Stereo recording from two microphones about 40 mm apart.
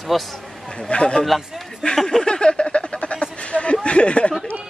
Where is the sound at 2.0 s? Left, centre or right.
Centre.